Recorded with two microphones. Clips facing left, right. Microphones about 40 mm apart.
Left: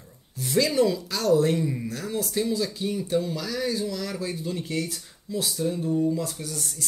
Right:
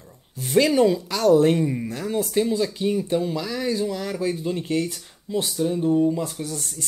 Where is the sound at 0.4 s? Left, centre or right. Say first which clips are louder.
Right 4 dB; right.